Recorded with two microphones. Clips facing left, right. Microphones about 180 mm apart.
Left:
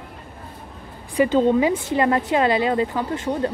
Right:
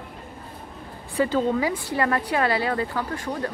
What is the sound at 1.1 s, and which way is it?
Speech, 20° left (ahead or behind).